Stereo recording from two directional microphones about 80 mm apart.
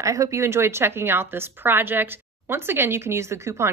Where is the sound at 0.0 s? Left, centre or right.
Right.